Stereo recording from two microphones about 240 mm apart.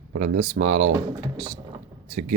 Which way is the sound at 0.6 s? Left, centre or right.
Right.